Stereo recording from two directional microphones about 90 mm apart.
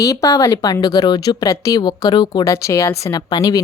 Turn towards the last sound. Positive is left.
turn(degrees=45)  # may be behind; listen again after turning